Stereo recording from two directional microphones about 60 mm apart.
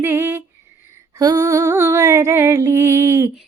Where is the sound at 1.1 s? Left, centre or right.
Right.